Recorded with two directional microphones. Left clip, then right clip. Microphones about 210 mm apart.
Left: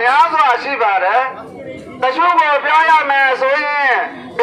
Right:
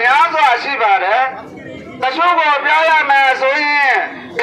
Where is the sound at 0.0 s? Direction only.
45° right (ahead or behind).